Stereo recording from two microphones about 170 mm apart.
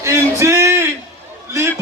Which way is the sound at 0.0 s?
15° right (ahead or behind).